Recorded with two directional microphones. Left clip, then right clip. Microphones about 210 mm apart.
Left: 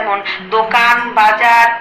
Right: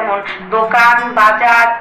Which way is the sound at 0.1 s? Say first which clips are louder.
Left 1 dB; 10° left (ahead or behind).